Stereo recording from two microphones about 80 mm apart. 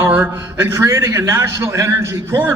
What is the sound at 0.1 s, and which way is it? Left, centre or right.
A man's voice, right.